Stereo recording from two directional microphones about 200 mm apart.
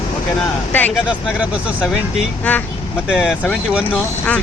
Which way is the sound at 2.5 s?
5° left (ahead or behind).